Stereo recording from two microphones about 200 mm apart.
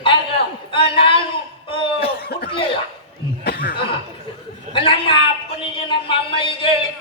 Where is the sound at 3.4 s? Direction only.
50° left (ahead or behind).